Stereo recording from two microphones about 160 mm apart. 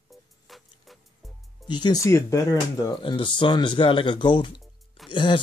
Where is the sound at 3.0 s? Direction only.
30° left (ahead or behind).